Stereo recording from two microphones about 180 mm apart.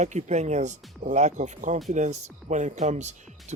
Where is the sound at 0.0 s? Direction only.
40° right (ahead or behind).